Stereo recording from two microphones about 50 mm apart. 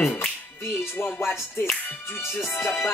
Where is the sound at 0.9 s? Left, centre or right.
Left.